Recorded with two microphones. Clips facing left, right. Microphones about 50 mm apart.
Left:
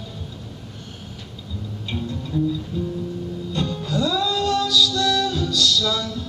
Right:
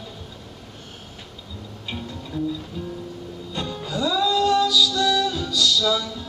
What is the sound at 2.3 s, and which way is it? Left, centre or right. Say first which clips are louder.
Music: left 4 dB; right.